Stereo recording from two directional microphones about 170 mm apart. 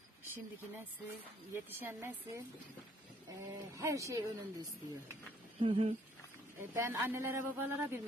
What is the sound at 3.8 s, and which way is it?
Speech, 20° right (ahead or behind).